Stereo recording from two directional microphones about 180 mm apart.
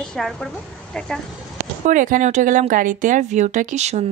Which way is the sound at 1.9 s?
45° right (ahead or behind).